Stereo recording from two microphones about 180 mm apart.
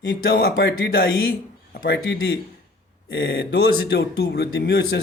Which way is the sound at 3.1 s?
85° left.